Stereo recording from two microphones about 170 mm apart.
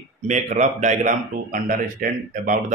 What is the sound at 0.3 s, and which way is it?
Speech, 45° right (ahead or behind).